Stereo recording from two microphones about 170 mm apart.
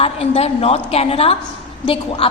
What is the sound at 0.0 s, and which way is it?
A woman's voice, 35° left (ahead or behind).